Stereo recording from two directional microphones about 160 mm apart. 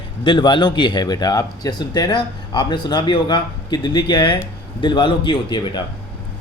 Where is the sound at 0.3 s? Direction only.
30° left (ahead or behind).